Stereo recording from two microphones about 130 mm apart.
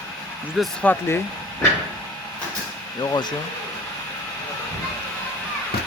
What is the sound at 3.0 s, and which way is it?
Speech, 30° left (ahead or behind).